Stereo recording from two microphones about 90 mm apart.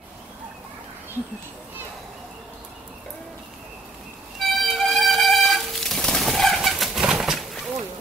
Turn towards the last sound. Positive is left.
turn(degrees=0)  # may be behind; listen again after turning